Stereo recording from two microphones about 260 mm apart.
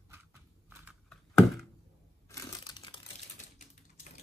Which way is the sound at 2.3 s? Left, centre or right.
Centre.